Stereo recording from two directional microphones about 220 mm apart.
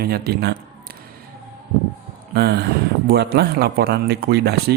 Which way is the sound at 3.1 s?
45° right (ahead or behind).